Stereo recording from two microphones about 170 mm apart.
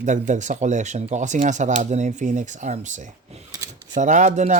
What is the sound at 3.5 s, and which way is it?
Drawer open or close, 20° right (ahead or behind).